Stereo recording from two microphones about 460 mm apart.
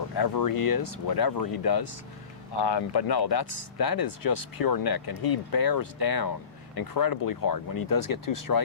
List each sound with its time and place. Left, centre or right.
0.2 s speech: left
2.5 s speech: left